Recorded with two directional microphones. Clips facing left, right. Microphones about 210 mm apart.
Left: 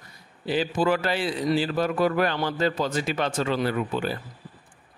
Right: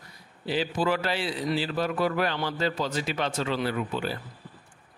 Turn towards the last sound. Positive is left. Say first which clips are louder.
# left 3 dB
turn(degrees=50)  # may be behind; listen again after turning